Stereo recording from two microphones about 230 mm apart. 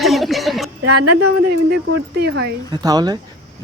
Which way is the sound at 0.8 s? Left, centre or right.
Right.